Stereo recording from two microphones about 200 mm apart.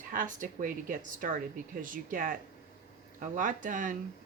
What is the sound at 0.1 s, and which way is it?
Speech, 40° right (ahead or behind).